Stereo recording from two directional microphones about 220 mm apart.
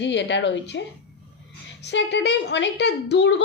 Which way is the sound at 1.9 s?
50° left (ahead or behind).